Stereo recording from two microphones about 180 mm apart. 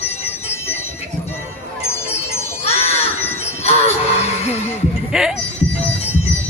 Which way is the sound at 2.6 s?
35° left (ahead or behind).